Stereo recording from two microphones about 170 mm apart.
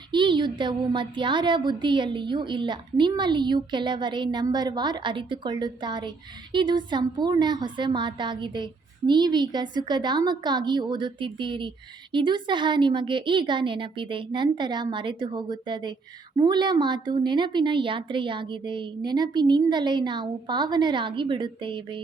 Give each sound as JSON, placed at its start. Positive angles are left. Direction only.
{"t": 0.1, "sound": "speech", "side_deg": -30}